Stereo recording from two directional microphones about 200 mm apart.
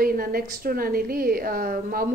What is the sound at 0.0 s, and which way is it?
A woman's voice, 45° right (ahead or behind).